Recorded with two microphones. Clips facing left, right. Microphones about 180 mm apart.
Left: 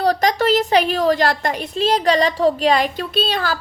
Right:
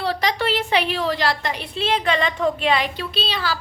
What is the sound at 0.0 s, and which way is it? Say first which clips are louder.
A woman's voice: left 6 dB; 45° left (ahead or behind).